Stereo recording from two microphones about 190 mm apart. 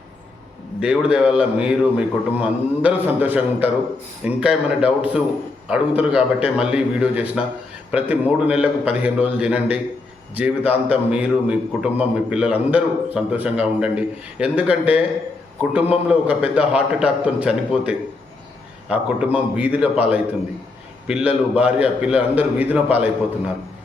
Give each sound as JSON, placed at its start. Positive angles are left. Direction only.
{"t": 0.8, "sound": "a man's voice", "side_deg": -5}